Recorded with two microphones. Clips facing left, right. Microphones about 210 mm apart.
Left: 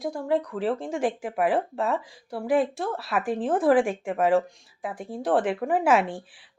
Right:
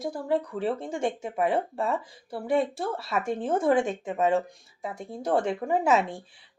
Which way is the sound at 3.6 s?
25° right (ahead or behind).